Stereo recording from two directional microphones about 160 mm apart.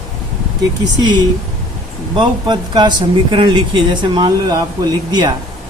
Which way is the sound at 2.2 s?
30° right (ahead or behind).